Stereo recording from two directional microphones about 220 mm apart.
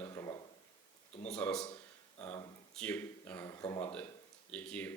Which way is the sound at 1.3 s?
5° left (ahead or behind).